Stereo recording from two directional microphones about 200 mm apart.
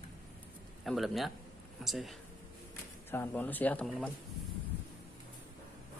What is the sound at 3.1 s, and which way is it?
Speech, 10° left (ahead or behind).